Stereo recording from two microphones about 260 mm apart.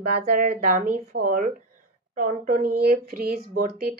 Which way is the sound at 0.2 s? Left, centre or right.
Right.